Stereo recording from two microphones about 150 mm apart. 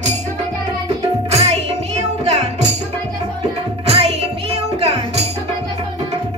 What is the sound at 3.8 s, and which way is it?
Music, 40° right (ahead or behind).